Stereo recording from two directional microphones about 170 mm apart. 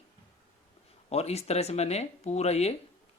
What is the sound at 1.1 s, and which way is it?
Speech, 40° left (ahead or behind).